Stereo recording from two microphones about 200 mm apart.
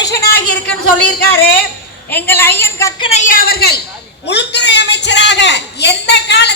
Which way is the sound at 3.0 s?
35° left (ahead or behind).